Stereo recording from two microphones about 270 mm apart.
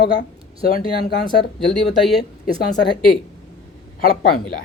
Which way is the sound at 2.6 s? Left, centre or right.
Left.